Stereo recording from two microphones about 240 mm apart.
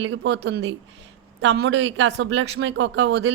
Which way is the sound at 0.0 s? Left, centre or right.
Right.